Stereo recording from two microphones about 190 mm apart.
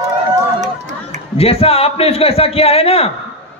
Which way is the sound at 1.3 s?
30° left (ahead or behind).